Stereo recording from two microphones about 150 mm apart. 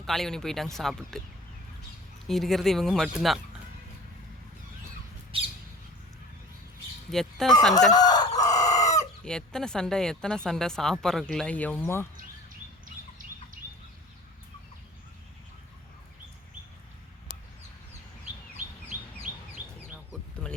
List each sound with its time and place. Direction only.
0.0 s speech: centre (ahead or behind)
2.2 s speech: centre (ahead or behind)
5.3 s bird: 35° right (ahead or behind)
7.1 s speech: centre (ahead or behind)
7.9 s chicken: 25° left (ahead or behind)
9.2 s speech: 5° left (ahead or behind)
20.4 s a sound: 5° left (ahead or behind)